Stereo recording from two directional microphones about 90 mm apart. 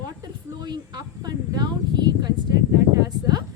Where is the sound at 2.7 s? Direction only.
40° right (ahead or behind).